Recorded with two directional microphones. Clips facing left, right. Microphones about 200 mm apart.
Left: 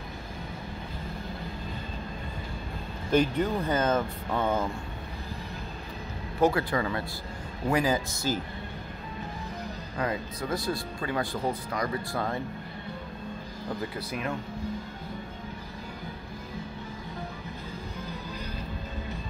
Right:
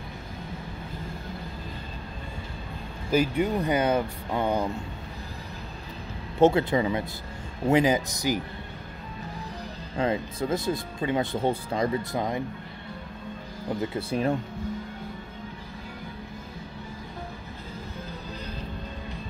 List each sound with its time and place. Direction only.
3.1 s speech: 10° right (ahead or behind)
6.4 s speech: 25° right (ahead or behind)
9.9 s speech: 25° right (ahead or behind)
13.7 s speech: 30° right (ahead or behind)